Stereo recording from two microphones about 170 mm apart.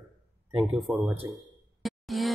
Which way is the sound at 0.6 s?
Centre (ahead or behind).